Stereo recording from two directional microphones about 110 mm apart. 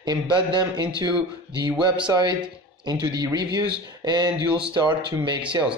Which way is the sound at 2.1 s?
45° right (ahead or behind).